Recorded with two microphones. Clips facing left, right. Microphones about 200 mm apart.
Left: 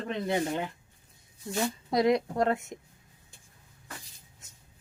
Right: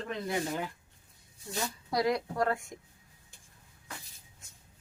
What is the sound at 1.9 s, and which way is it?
Speech, 20° left (ahead or behind).